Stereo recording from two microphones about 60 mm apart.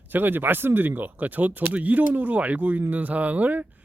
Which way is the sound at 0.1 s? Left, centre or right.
Right.